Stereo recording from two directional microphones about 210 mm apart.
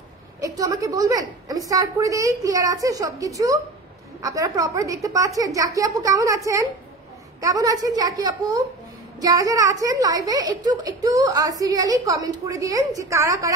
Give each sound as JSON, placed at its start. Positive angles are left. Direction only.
{"t": 0.4, "sound": "a woman's voice", "side_deg": -15}